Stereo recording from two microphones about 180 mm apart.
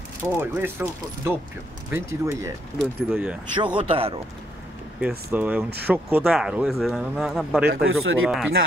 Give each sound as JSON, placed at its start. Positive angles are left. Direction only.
{"t": 0.4, "sound": "speech", "side_deg": -10}
{"t": 3.1, "sound": "speech", "side_deg": -5}
{"t": 3.4, "sound": "speech", "side_deg": -25}
{"t": 5.0, "sound": "speech", "side_deg": -10}